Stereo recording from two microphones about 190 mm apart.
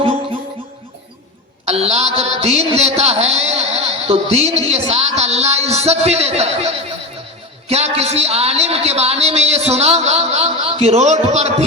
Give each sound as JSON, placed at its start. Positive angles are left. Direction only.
{"t": 1.6, "sound": "a woman's voice", "side_deg": -35}